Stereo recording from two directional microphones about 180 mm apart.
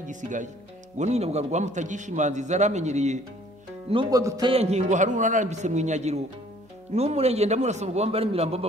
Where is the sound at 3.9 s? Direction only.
25° right (ahead or behind).